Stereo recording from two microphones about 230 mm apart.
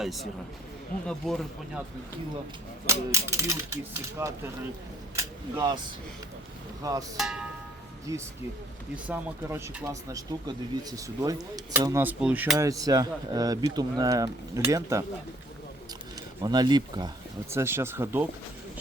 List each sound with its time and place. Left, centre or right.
0.0 s speech: centre
2.8 s speech: centre
6.8 s speech: centre
7.2 s speech: centre
8.1 s speech: centre
16.4 s speech: centre